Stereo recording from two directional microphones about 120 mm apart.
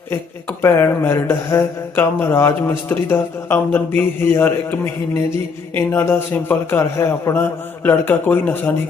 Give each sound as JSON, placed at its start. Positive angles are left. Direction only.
{"t": 0.1, "sound": "a man's voice", "side_deg": 20}